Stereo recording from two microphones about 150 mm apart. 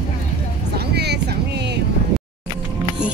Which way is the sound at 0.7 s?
90° right.